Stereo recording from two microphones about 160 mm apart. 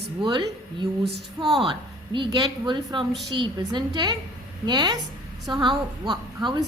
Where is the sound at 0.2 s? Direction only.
30° right (ahead or behind).